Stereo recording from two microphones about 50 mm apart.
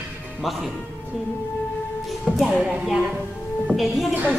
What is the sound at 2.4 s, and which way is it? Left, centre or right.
Music, centre.